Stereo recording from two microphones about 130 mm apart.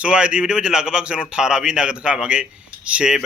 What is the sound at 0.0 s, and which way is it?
A man's voice, 5° right (ahead or behind).